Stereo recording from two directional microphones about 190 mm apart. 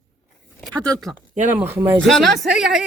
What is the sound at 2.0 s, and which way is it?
Speech, centre (ahead or behind).